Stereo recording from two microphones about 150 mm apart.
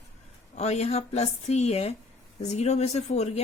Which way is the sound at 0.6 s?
45° left (ahead or behind).